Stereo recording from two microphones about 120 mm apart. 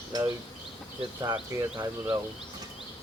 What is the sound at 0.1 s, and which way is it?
Speech, 35° right (ahead or behind).